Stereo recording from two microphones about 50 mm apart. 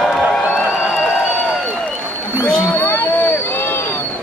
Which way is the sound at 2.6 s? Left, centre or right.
Left.